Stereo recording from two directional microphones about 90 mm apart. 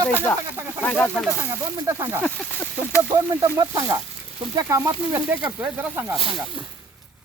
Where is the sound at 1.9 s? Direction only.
30° right (ahead or behind).